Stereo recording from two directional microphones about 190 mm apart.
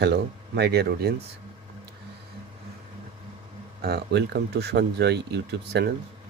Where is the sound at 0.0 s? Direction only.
60° right (ahead or behind).